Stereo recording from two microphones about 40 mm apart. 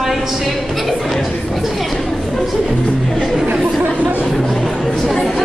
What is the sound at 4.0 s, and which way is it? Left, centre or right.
Chatter, right.